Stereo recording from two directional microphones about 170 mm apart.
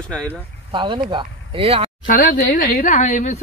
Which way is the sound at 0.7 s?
30° right (ahead or behind).